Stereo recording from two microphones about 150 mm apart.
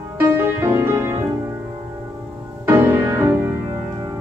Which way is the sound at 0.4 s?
15° right (ahead or behind).